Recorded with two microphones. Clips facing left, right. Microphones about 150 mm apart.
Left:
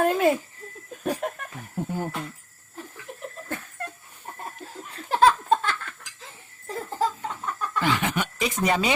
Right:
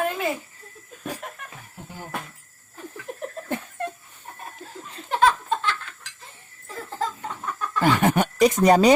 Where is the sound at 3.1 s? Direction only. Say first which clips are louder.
Right 8 dB; 40° right (ahead or behind).